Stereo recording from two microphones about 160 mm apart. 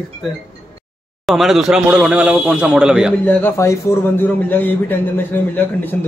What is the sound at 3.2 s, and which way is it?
A man's voice, 10° left (ahead or behind).